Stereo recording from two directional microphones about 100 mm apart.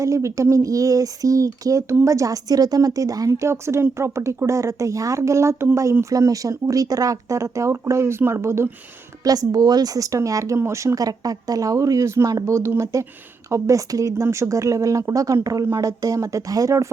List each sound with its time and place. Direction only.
0.0 s speech: 30° right (ahead or behind)
9.2 s speech: 40° right (ahead or behind)